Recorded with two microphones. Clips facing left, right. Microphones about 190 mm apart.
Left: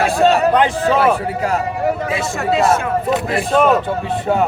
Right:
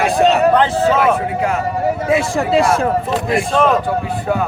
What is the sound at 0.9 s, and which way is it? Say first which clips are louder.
Speech: even; 35° left (ahead or behind).